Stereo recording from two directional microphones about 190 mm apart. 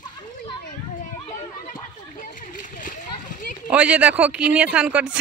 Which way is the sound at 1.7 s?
45° left (ahead or behind).